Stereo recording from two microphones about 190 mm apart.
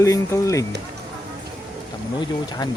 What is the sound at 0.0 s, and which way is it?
Speech, 15° left (ahead or behind).